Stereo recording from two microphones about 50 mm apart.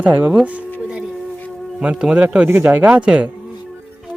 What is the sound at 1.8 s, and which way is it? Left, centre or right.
Speech, centre.